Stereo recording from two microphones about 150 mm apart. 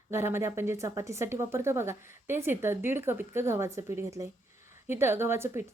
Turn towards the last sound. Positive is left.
turn(degrees=-15)  # may be behind; listen again after turning